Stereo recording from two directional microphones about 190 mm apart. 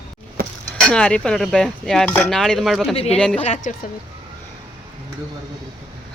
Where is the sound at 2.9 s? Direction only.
30° left (ahead or behind).